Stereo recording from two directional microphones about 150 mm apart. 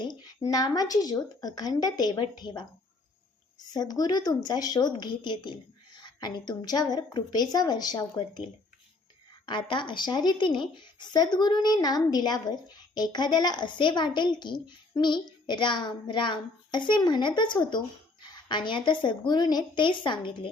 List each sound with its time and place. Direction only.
0.0 s speech: 25° left (ahead or behind)
3.7 s speech: 25° left (ahead or behind)
9.5 s a woman's voice: 30° left (ahead or behind)